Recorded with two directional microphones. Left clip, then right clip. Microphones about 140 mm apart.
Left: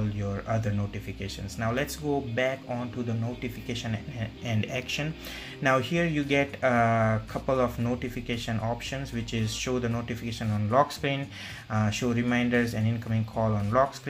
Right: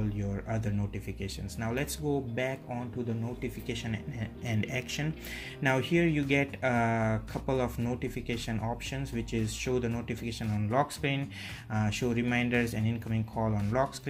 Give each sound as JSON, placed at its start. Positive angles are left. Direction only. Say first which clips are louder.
{"t": 0.3, "sound": "speech", "louder": "left 5 dB", "side_deg": -35}
{"t": 3.6, "sound": "speech", "louder": "left 2 dB", "side_deg": -35}